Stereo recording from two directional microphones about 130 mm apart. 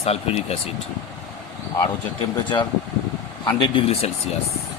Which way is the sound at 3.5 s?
40° left (ahead or behind).